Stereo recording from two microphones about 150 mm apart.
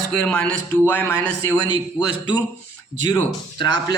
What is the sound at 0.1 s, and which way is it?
Speech, 5° left (ahead or behind).